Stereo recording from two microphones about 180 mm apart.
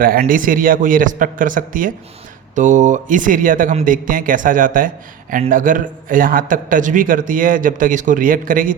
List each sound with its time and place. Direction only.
0.0 s a man's voice: 50° right (ahead or behind)